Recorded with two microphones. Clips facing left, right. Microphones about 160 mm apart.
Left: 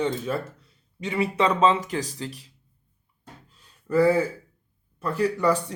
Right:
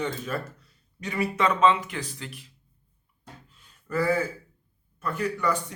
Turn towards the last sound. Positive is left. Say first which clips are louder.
# left 5 dB
turn(degrees=35)  # may be behind; listen again after turning